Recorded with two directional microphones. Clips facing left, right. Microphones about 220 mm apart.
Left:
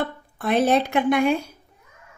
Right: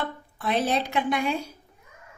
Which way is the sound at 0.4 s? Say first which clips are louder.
Left 6 dB; 50° left (ahead or behind).